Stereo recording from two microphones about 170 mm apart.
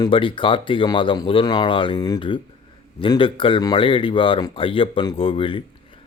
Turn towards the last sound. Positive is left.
turn(degrees=30)  # may be behind; listen again after turning